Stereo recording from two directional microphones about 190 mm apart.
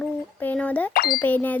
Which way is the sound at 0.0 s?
10° left (ahead or behind).